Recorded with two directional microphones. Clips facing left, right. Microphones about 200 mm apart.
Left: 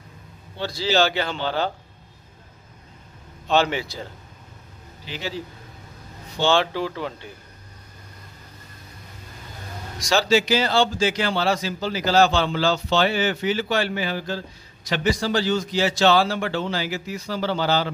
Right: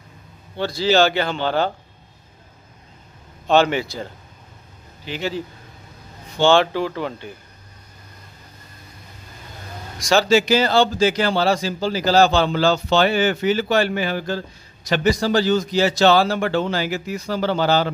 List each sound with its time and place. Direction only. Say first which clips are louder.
0.6 s speech: right 4 dB; 55° right (ahead or behind)
3.4 s speech: right 4 dB; 55° right (ahead or behind)
5.0 s a man's voice: right 5 dB; 55° right (ahead or behind)
6.4 s speech: right 5 dB; 55° right (ahead or behind)
9.9 s speech: right 3 dB; 50° right (ahead or behind)
14.9 s speech: right 4 dB; 40° right (ahead or behind)